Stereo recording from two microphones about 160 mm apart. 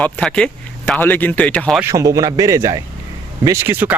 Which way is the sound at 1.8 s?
20° right (ahead or behind).